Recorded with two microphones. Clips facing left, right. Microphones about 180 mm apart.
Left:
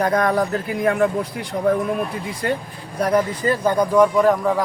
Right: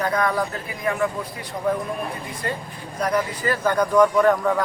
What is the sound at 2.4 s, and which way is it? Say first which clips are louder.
Speech: left 6 dB; 75° left (ahead or behind).